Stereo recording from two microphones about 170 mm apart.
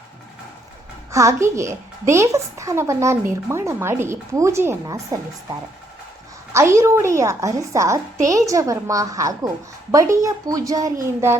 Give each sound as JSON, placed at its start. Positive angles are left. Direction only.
{"t": 1.1, "sound": "a woman's voice", "side_deg": -20}
{"t": 6.5, "sound": "a woman's voice", "side_deg": -15}